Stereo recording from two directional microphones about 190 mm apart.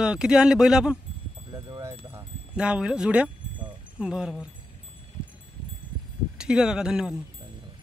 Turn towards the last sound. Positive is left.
turn(degrees=-5)  # may be behind; listen again after turning